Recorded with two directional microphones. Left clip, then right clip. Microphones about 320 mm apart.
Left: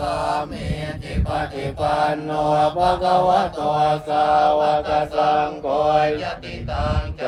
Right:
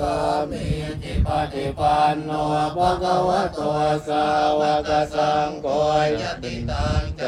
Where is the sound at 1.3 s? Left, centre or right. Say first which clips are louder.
Right 1 dB; centre.